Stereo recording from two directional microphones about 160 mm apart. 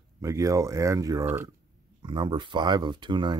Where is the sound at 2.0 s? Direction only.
30° right (ahead or behind).